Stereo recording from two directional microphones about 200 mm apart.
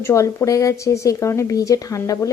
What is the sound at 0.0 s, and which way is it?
Speech, 15° left (ahead or behind).